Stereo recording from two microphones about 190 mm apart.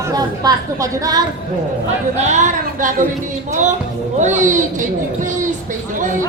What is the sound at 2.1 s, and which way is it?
Speech, 40° right (ahead or behind).